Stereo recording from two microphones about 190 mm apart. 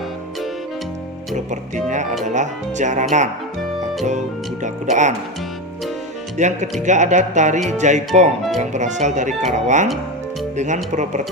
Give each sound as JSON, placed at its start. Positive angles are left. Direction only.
{"t": 1.5, "sound": "speech", "side_deg": -40}
{"t": 4.6, "sound": "speech", "side_deg": -40}
{"t": 6.3, "sound": "speech", "side_deg": -40}
{"t": 10.9, "sound": "speech", "side_deg": -40}